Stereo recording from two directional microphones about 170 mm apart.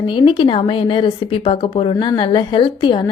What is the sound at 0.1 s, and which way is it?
Speech, 30° left (ahead or behind).